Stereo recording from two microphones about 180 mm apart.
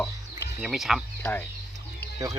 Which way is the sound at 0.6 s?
Centre (ahead or behind).